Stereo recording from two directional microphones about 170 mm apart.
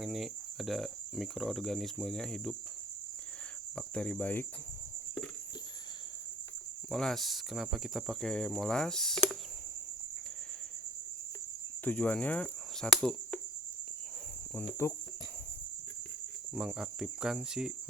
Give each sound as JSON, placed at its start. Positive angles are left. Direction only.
{"t": 0.0, "sound": "cricket", "side_deg": 0}
{"t": 3.8, "sound": "cricket", "side_deg": 5}
{"t": 6.9, "sound": "cricket", "side_deg": 0}
{"t": 11.9, "sound": "cricket", "side_deg": 10}
{"t": 14.7, "sound": "cricket", "side_deg": 15}
{"t": 16.6, "sound": "cricket", "side_deg": -5}